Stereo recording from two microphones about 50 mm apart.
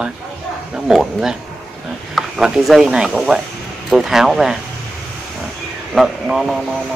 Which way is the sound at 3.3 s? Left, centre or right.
Right.